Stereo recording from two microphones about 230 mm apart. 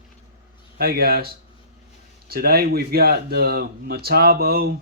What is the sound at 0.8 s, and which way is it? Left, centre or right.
Speech, right.